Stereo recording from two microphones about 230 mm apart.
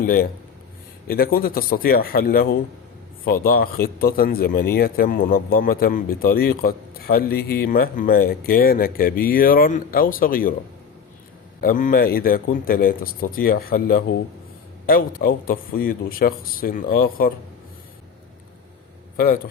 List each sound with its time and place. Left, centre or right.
0.0 s speech: left
11.6 s speech: left
19.1 s a man's voice: left